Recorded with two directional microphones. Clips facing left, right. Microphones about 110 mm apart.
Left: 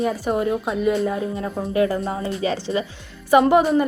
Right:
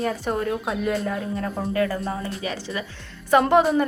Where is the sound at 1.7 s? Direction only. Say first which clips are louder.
Left 5 dB; 20° left (ahead or behind).